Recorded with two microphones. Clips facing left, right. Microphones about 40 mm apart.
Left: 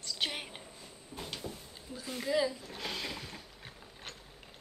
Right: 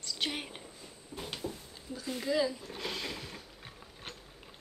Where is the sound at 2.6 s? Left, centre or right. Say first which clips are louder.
Right 1 dB; centre.